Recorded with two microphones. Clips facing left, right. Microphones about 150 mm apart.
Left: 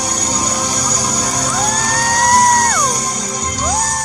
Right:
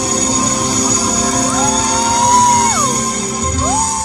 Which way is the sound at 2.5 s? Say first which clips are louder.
Right 2 dB; 10° right (ahead or behind).